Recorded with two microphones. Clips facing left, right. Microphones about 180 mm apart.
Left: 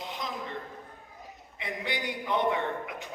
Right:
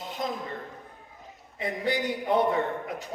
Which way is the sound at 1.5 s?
40° right (ahead or behind).